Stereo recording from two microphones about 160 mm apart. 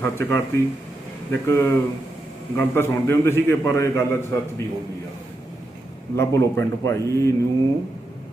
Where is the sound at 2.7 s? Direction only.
15° left (ahead or behind).